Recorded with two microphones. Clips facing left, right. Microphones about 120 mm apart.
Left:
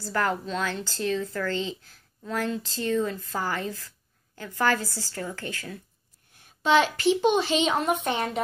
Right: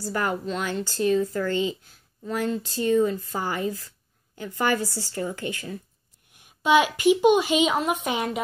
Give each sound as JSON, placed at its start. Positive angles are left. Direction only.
{"t": 0.1, "sound": "a woman's voice", "side_deg": -10}